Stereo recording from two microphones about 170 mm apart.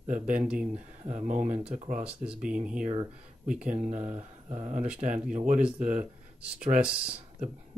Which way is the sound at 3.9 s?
45° right (ahead or behind).